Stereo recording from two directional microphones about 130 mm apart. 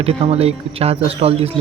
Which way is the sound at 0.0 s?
50° right (ahead or behind).